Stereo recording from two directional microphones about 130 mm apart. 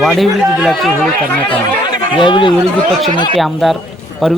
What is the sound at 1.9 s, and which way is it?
Speech, 40° left (ahead or behind).